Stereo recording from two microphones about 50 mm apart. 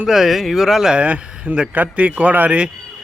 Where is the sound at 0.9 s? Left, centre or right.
Right.